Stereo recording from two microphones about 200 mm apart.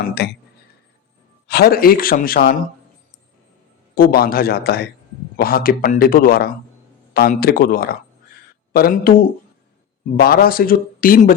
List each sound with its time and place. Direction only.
0.2 s speech: 55° left (ahead or behind)
1.5 s speech: 50° left (ahead or behind)
3.9 s speech: 45° left (ahead or behind)
10.2 s speech: 50° left (ahead or behind)